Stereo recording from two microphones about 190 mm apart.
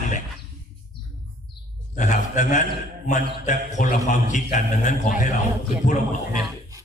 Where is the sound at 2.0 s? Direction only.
40° left (ahead or behind).